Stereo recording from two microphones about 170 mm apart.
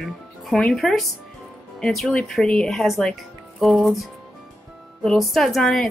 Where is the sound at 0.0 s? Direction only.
5° left (ahead or behind).